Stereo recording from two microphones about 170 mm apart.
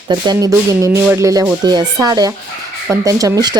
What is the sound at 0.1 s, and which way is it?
Speech, 25° right (ahead or behind).